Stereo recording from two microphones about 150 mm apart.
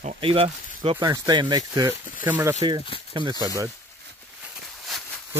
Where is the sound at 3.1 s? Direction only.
30° right (ahead or behind).